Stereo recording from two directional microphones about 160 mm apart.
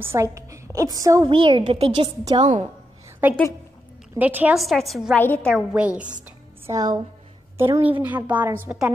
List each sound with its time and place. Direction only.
0.0 s a woman's voice: 15° right (ahead or behind)
1.3 s a woman's voice: 30° right (ahead or behind)
2.4 s a woman's voice: 50° right (ahead or behind)
3.2 s a woman's voice: 10° right (ahead or behind); by 5.6 s 10° left (ahead or behind)
5.7 s a woman's voice: 10° right (ahead or behind)
6.6 s a woman's voice: 20° right (ahead or behind)